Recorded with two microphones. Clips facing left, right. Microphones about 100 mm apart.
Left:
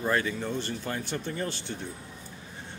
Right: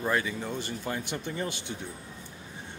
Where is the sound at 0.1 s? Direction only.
10° right (ahead or behind).